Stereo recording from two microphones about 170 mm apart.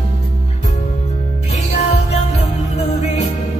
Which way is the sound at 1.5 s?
40° left (ahead or behind).